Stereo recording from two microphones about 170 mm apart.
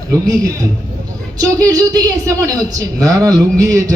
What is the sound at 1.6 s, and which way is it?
Speech, 20° right (ahead or behind).